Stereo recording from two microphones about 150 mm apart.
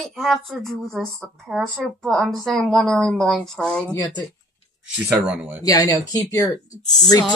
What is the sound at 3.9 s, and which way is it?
Speech, 30° left (ahead or behind).